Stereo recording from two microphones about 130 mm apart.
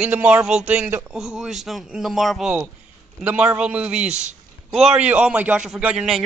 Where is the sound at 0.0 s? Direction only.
15° right (ahead or behind).